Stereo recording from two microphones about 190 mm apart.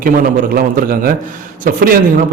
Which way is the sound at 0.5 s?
50° right (ahead or behind).